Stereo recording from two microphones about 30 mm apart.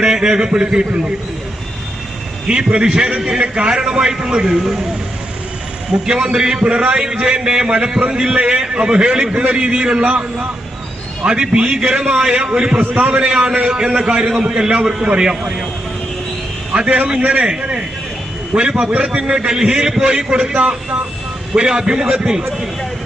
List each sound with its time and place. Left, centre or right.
0.0 s a man's voice: right
2.5 s a man's voice: right
4.5 s speech: centre
5.9 s a man's voice: right
10.1 s a man's voice: right
14.5 s a man's voice: centre
16.8 s a man's voice: right
17.4 s a man's voice: right
19.6 s a man's voice: right
20.6 s a man's voice: right
21.5 s a man's voice: right